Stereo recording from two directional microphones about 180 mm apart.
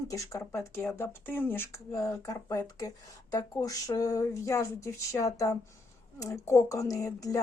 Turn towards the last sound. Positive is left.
turn(degrees=20)  # may be behind; listen again after turning